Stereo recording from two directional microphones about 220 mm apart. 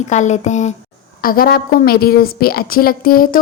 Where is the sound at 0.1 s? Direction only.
30° left (ahead or behind).